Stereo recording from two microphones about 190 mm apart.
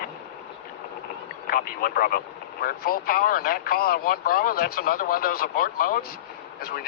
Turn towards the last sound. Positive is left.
turn(degrees=50)  # may be behind; listen again after turning